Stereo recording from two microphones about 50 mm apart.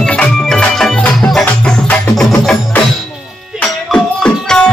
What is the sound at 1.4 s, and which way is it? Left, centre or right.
Music, left.